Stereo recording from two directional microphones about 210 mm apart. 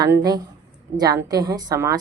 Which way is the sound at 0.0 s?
20° right (ahead or behind).